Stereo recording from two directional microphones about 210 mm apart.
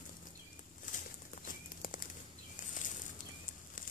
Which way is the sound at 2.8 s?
40° left (ahead or behind).